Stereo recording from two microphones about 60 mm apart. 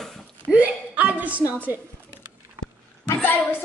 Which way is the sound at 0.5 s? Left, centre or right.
Right.